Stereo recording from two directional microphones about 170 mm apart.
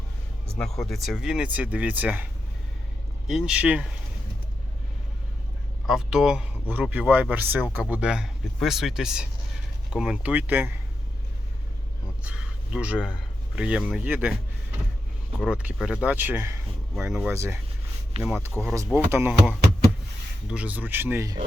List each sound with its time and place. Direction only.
0.5 s speech: 5° left (ahead or behind)
5.9 s a man's voice: 5° right (ahead or behind)
12.2 s a sound: 5° right (ahead or behind)
13.6 s a man's voice: 5° right (ahead or behind)
15.4 s a man's voice: 5° right (ahead or behind)
18.1 s speech: 35° right (ahead or behind)
18.6 s a man's voice: 20° right (ahead or behind)
20.5 s a man's voice: 10° right (ahead or behind)